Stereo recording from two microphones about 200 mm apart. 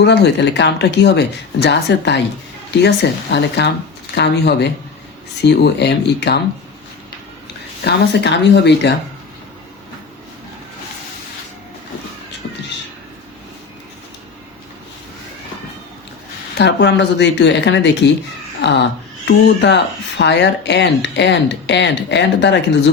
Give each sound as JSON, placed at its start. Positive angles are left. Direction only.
{"t": 0.0, "sound": "speech", "side_deg": 60}
{"t": 7.9, "sound": "speech", "side_deg": 60}
{"t": 16.6, "sound": "speech", "side_deg": 60}